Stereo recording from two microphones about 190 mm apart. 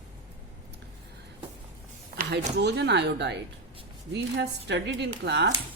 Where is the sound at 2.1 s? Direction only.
50° right (ahead or behind).